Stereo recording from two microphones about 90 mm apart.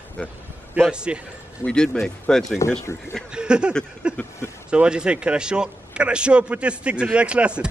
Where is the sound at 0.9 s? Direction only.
10° right (ahead or behind).